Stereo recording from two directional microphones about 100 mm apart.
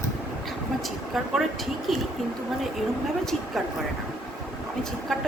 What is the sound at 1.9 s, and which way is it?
Speech, centre (ahead or behind).